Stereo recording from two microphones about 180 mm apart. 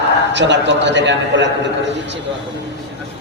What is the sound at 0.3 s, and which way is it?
A man's voice, 75° right (ahead or behind).